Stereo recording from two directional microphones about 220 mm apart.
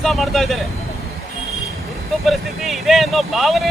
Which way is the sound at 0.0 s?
Centre (ahead or behind).